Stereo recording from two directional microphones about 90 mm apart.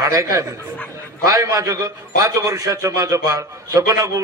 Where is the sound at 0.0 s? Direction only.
35° right (ahead or behind).